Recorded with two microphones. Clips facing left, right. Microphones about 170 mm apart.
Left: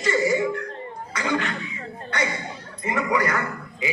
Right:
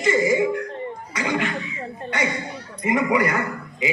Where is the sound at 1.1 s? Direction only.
15° right (ahead or behind).